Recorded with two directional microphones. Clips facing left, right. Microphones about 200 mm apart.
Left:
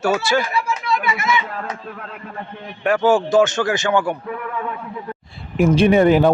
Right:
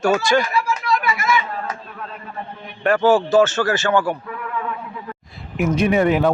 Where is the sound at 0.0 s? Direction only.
5° left (ahead or behind).